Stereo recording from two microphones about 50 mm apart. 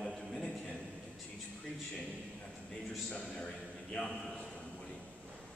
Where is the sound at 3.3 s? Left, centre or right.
Centre.